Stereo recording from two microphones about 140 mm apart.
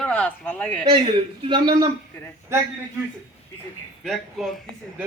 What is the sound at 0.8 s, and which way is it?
A man's voice, 40° right (ahead or behind).